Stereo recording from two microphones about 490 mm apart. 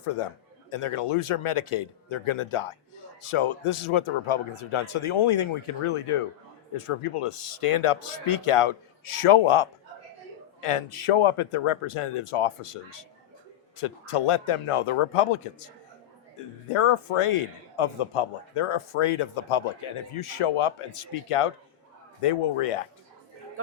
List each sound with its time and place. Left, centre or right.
0.7 s a man's voice: left